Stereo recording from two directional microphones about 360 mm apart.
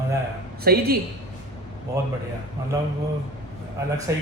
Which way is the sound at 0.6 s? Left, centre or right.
Right.